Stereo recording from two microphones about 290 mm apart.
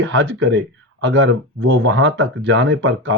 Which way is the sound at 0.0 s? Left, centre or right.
Right.